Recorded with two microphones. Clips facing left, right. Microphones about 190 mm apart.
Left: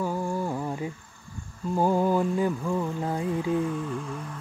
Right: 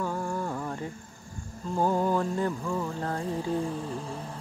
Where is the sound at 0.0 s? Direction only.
15° left (ahead or behind).